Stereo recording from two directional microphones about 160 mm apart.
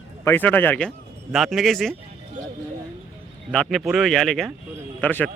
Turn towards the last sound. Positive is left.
turn(degrees=10)  # may be behind; listen again after turning